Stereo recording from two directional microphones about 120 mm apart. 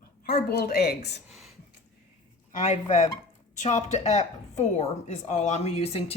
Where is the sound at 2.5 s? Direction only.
80° left.